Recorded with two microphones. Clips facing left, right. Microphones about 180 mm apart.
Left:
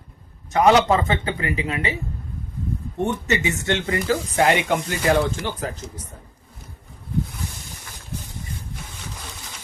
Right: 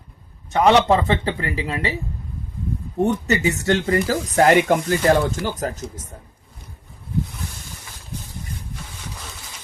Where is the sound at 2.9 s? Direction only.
35° right (ahead or behind).